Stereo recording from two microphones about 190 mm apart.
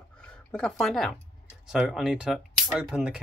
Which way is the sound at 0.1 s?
5° left (ahead or behind).